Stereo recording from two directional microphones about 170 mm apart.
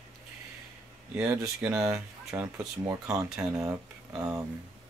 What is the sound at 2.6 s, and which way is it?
Speech, 20° right (ahead or behind).